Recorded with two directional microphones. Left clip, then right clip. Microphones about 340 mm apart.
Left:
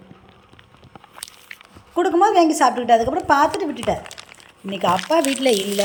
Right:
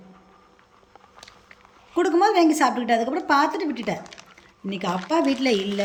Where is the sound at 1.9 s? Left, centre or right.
Centre.